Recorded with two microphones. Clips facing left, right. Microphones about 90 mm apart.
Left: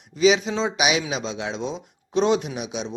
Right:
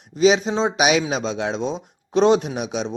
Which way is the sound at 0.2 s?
35° right (ahead or behind).